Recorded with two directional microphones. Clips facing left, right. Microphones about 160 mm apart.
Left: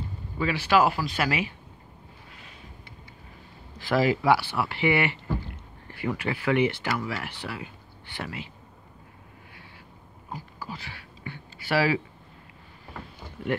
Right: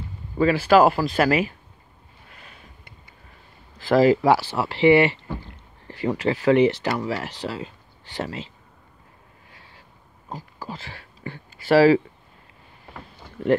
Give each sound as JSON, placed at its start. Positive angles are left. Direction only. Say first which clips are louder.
{"t": 0.4, "sound": "speech", "louder": "right 7 dB", "side_deg": -45}
{"t": 3.9, "sound": "speech", "louder": "right 6 dB", "side_deg": -40}
{"t": 10.3, "sound": "speech", "louder": "right 3 dB", "side_deg": -40}